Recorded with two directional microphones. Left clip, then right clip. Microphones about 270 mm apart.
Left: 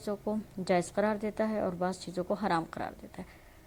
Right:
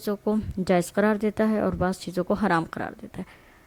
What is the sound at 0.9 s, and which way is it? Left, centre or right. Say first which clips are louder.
Speech: right 7 dB; right.